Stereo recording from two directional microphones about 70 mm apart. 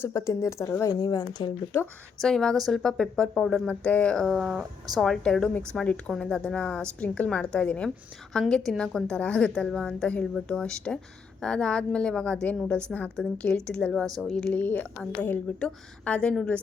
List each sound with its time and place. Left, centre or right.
0.0 s speech: left
1.0 s speech: left
2.2 s speech: centre
4.3 s speech: centre
4.9 s speech: centre
7.0 s a woman's voice: left